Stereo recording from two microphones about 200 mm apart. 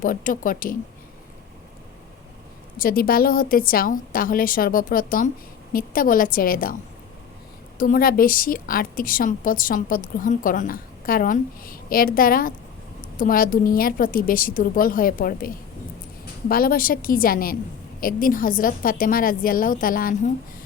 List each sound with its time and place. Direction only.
0.0 s a woman's voice: 45° left (ahead or behind)
2.7 s a woman's voice: 45° left (ahead or behind)
7.8 s a woman's voice: 45° left (ahead or behind)